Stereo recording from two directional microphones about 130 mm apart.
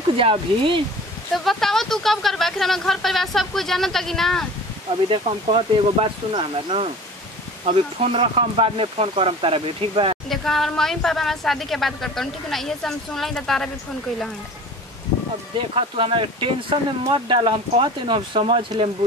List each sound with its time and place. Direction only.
0.2 s speech: 40° right (ahead or behind)
1.3 s a woman's voice: centre (ahead or behind)
5.1 s speech: 45° right (ahead or behind)
10.3 s a woman's voice: centre (ahead or behind)
15.5 s speech: 45° right (ahead or behind)